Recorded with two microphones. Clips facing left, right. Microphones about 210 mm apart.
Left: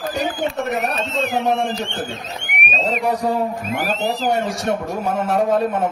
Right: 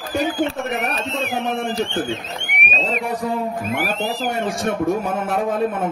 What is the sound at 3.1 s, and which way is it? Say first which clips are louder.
A man's voice: left 2 dB; 55° right (ahead or behind).